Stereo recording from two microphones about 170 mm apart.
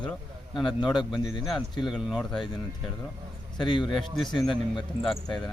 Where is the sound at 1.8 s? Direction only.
5° right (ahead or behind).